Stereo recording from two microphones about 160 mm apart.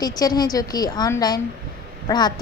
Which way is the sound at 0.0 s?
25° left (ahead or behind).